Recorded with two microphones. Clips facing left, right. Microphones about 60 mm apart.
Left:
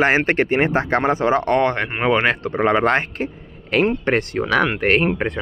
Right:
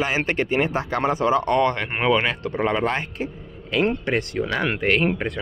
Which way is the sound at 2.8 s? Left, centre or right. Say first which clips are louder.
Left 6 dB; left.